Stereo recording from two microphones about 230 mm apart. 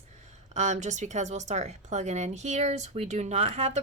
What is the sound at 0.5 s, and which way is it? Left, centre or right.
A woman's voice, right.